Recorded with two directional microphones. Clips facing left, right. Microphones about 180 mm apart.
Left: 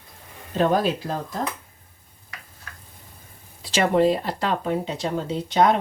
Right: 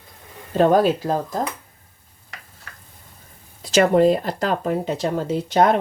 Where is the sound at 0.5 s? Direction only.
45° right (ahead or behind).